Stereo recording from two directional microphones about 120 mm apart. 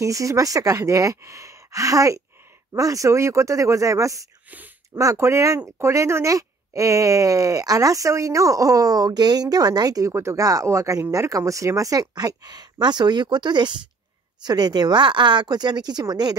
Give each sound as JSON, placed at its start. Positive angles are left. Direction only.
{"t": 0.0, "sound": "speech", "side_deg": -25}